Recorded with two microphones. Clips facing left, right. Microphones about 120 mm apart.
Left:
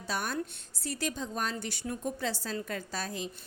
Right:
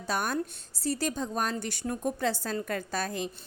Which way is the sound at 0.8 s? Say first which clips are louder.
Right 5 dB; 35° right (ahead or behind).